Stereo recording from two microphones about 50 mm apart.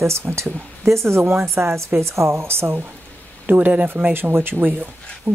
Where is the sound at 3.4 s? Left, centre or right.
Right.